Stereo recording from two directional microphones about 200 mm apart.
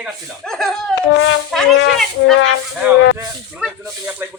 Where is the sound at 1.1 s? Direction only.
65° left (ahead or behind).